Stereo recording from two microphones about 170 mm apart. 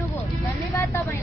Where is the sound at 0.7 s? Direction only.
15° left (ahead or behind).